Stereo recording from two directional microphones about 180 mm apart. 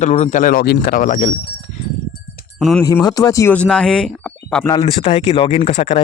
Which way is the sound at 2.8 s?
20° left (ahead or behind).